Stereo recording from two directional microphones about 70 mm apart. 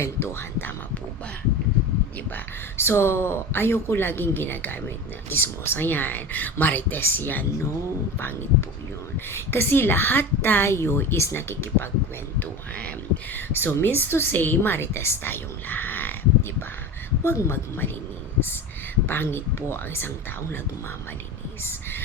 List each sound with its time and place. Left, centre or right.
0.0 s speech: left
2.3 s speech: left
9.1 s speech: left
13.3 s a woman's voice: left
19.0 s speech: left
21.6 s speech: left